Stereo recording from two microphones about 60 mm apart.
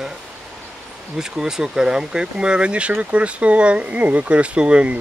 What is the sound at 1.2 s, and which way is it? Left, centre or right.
Speech, centre.